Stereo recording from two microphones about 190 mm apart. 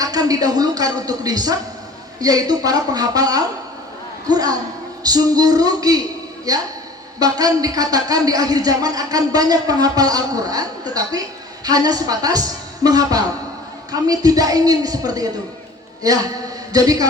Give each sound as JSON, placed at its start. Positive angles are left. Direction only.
{"t": 0.0, "sound": "a man's voice", "side_deg": -20}